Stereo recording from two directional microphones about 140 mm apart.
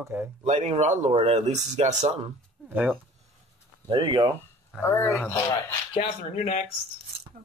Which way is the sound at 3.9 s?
35° right (ahead or behind).